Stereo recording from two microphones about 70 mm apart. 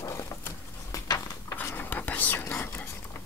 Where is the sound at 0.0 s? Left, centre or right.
Left.